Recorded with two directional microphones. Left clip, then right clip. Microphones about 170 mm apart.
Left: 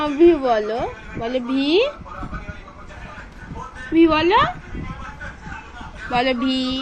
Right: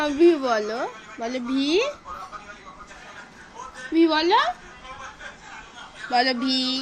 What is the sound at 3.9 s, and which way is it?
Speech, 25° right (ahead or behind).